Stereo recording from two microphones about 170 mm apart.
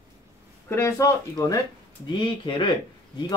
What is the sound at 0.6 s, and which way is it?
Speech, 15° left (ahead or behind).